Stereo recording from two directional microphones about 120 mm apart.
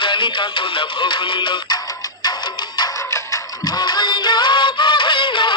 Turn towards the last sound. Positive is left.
turn(degrees=40)  # may be behind; listen again after turning